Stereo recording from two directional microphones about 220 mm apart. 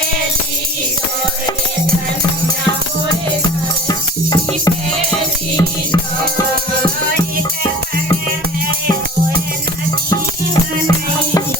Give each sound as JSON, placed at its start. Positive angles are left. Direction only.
{"t": 3.8, "sound": "music", "side_deg": 15}
{"t": 10.1, "sound": "music", "side_deg": 15}